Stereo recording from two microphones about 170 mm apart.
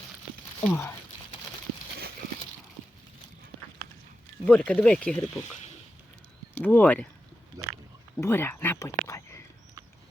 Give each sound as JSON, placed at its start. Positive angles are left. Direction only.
{"t": 0.6, "sound": "speech", "side_deg": 15}
{"t": 4.4, "sound": "speech", "side_deg": 5}
{"t": 7.6, "sound": "oink", "side_deg": -20}
{"t": 8.1, "sound": "speech", "side_deg": 15}